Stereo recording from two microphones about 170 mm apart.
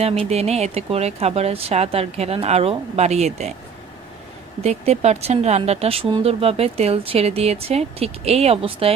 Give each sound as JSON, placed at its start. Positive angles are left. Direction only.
{"t": 0.0, "sound": "speech", "side_deg": -35}
{"t": 4.6, "sound": "speech", "side_deg": -40}